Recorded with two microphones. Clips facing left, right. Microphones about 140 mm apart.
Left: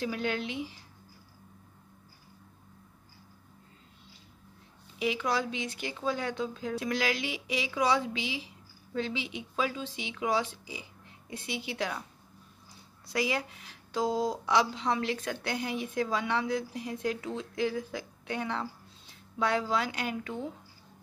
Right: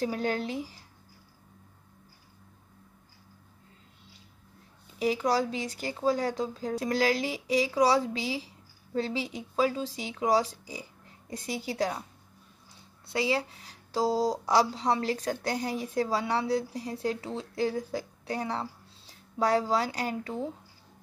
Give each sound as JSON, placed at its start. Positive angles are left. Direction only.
{"t": 0.0, "sound": "speech", "side_deg": -40}
{"t": 4.9, "sound": "speech", "side_deg": -40}
{"t": 13.0, "sound": "speech", "side_deg": -30}